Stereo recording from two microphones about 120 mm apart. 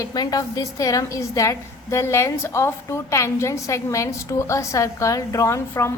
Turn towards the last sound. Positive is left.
turn(degrees=25)  # may be behind; listen again after turning